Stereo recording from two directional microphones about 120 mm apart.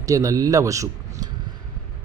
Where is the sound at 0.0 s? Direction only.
25° right (ahead or behind).